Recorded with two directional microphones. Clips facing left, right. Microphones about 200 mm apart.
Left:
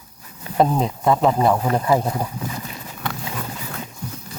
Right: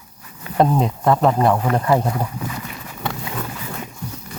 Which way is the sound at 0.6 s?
Centre (ahead or behind).